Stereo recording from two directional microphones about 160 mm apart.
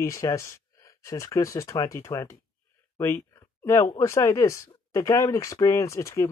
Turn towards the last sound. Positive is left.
turn(degrees=20)  # may be behind; listen again after turning